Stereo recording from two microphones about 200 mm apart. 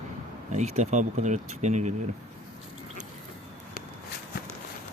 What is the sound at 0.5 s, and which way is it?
Speech, 35° right (ahead or behind).